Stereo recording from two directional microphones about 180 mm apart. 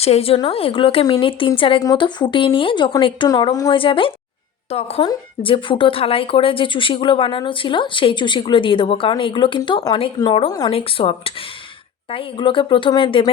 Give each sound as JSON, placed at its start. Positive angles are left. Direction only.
{"t": 0.0, "sound": "speech", "side_deg": 35}
{"t": 12.1, "sound": "speech", "side_deg": 30}